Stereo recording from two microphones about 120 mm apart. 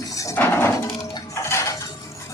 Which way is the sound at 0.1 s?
25° left (ahead or behind).